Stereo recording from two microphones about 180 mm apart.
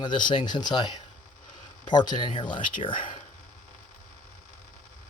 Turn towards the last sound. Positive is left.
turn(degrees=30)  # may be behind; listen again after turning